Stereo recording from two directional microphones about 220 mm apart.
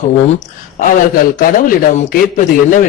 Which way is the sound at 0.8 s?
35° left (ahead or behind).